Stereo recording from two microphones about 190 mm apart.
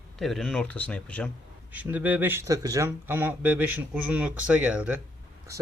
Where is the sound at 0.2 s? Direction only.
Centre (ahead or behind).